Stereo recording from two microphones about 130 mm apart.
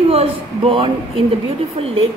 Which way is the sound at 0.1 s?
45° right (ahead or behind).